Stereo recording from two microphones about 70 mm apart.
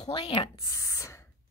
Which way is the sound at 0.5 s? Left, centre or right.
Left.